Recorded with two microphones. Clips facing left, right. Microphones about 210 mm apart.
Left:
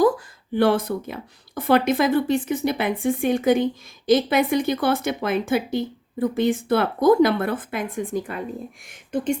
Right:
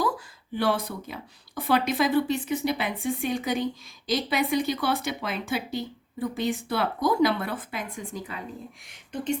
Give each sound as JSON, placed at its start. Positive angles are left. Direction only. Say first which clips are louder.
{"t": 0.5, "sound": "a woman's voice", "louder": "left 7 dB", "side_deg": 50}